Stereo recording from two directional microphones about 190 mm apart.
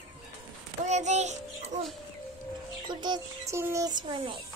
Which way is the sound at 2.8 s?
20° right (ahead or behind).